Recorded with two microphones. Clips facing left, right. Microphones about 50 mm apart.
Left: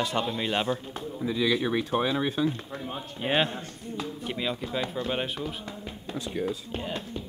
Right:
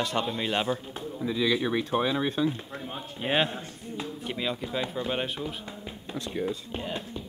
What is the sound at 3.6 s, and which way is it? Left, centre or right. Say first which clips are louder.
Speech: left 1 dB; centre.